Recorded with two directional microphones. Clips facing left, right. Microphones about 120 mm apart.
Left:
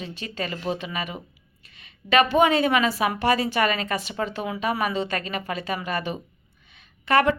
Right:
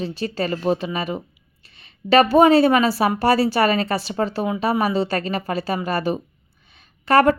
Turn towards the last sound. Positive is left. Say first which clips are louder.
# right 5 dB
turn(degrees=-40)  # may be behind; listen again after turning